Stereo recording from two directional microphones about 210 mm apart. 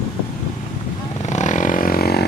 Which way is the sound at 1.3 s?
35° left (ahead or behind).